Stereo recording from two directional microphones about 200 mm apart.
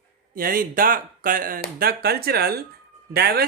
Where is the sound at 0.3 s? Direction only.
45° right (ahead or behind).